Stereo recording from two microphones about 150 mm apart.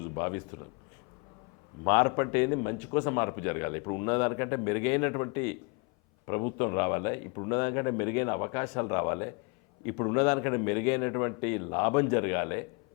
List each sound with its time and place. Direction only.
0.0 s speech: 20° left (ahead or behind)
1.8 s a man's voice: 15° left (ahead or behind)